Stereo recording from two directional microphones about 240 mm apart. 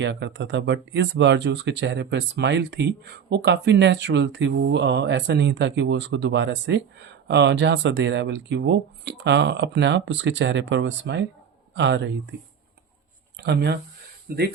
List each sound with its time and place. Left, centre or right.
0.0 s speech: right
13.4 s speech: right